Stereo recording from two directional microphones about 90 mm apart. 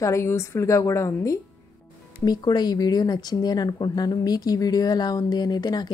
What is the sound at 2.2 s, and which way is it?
Speech, 50° left (ahead or behind).